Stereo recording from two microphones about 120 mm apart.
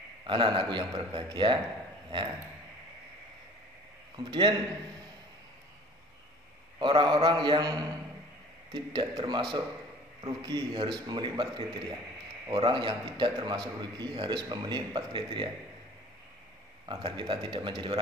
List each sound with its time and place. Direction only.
0.3 s a man's voice: 45° right (ahead or behind)
4.2 s a man's voice: 40° right (ahead or behind)
6.8 s a man's voice: 40° right (ahead or behind)
16.8 s a man's voice: 40° right (ahead or behind)